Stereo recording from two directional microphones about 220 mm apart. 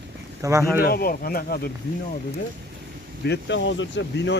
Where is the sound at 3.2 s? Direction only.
50° left (ahead or behind).